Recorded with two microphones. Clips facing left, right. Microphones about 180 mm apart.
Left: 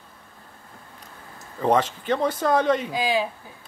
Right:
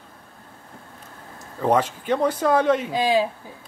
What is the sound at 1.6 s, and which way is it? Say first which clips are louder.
Speech: right 1 dB; 5° right (ahead or behind).